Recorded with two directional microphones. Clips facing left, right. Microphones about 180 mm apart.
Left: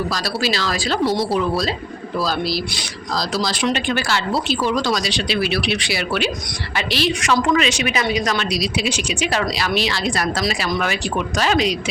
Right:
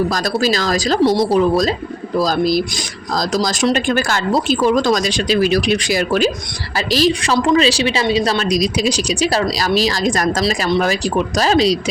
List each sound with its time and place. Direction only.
0.1 s a woman's voice: 45° right (ahead or behind)